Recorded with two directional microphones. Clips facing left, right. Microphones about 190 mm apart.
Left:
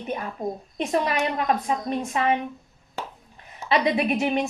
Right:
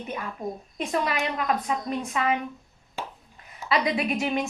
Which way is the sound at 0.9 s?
30° left (ahead or behind).